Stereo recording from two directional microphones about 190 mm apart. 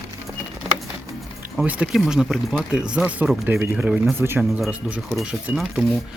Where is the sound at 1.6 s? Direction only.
5° right (ahead or behind).